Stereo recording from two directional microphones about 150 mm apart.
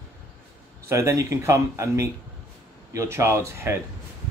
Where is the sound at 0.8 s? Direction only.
20° right (ahead or behind).